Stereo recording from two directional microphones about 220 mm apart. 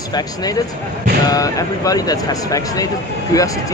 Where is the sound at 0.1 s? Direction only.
20° left (ahead or behind).